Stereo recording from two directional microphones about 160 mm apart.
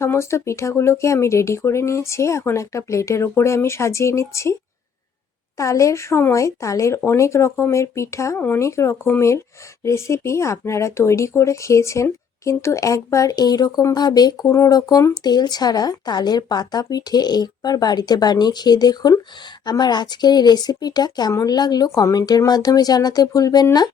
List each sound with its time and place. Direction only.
0.0 s speech: 15° left (ahead or behind)
5.5 s speech: 20° left (ahead or behind)